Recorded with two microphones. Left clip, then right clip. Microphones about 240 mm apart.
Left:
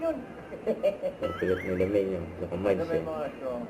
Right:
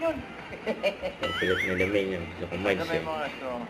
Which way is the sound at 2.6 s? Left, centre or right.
Centre.